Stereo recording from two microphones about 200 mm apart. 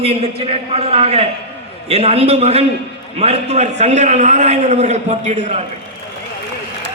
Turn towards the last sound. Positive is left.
turn(degrees=-35)  # may be behind; listen again after turning